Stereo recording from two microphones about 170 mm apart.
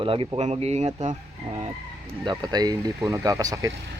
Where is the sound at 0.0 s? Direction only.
30° right (ahead or behind).